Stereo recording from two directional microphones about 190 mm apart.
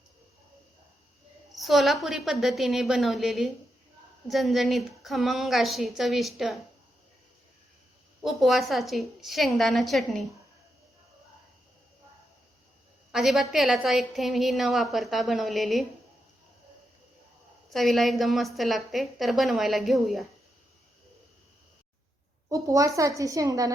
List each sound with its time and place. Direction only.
1.5 s a woman's voice: centre (ahead or behind)
8.2 s a woman's voice: centre (ahead or behind)
13.1 s a woman's voice: centre (ahead or behind)
17.7 s a woman's voice: centre (ahead or behind)
22.4 s a woman's voice: 15° right (ahead or behind)